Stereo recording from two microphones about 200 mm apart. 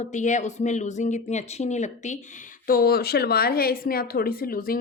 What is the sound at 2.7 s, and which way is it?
Speech, 50° left (ahead or behind).